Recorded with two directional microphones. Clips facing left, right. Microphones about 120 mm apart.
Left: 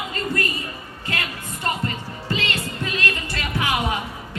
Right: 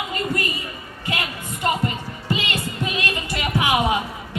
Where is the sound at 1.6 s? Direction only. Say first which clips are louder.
Right 3 dB; 15° right (ahead or behind).